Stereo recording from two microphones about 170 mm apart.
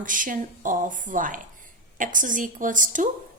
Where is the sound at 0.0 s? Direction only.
50° right (ahead or behind).